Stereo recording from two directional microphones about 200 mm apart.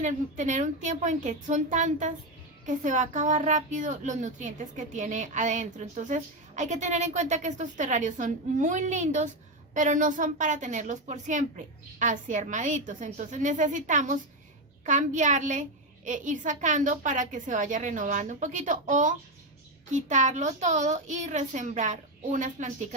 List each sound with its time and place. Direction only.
0.0 s a woman's voice: 40° right (ahead or behind)